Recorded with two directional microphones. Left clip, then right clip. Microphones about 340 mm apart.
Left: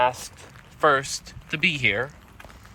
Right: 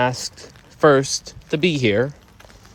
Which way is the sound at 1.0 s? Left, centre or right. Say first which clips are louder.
Right 7 dB; centre.